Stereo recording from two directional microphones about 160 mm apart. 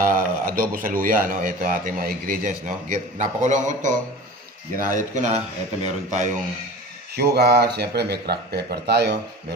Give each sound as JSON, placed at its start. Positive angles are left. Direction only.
{"t": 0.0, "sound": "speech", "side_deg": -60}
{"t": 7.2, "sound": "speech", "side_deg": -90}